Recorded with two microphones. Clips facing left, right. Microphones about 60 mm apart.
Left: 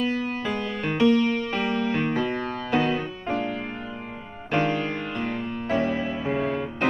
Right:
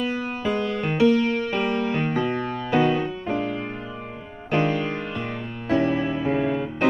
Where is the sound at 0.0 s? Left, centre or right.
Centre.